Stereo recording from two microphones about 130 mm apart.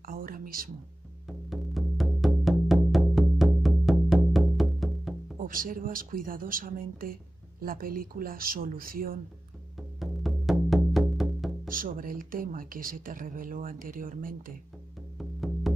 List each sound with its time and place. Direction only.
0.0 s a sound: 90° right
1.5 s music: centre (ahead or behind)
5.4 s speech: 90° right
9.9 s music: centre (ahead or behind)
11.7 s speech: 90° right
15.1 s music: centre (ahead or behind)